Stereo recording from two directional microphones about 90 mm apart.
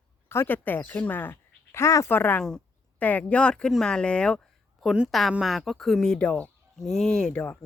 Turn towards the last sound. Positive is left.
turn(degrees=10)  # may be behind; listen again after turning